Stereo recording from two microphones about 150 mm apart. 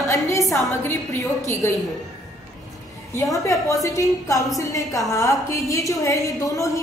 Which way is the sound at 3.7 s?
20° left (ahead or behind).